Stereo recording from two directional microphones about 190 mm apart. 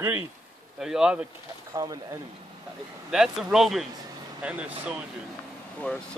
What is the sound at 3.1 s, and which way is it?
Speech, centre (ahead or behind).